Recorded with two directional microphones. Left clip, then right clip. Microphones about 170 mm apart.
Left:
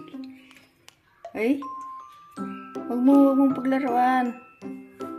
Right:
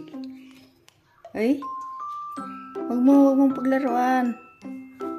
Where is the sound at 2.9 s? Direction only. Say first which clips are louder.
Right 1 dB; 20° right (ahead or behind).